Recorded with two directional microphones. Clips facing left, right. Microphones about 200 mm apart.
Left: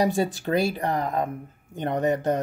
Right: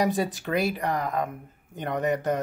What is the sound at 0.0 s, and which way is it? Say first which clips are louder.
Speech: left 2 dB; 25° left (ahead or behind).